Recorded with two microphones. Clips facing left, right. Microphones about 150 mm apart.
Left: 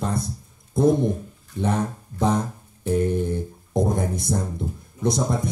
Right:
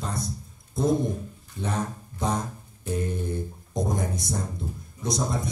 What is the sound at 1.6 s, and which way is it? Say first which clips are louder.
Speech: left 6 dB; 60° left (ahead or behind).